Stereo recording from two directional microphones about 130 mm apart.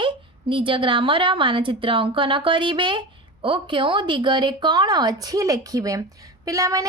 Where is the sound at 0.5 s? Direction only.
40° right (ahead or behind).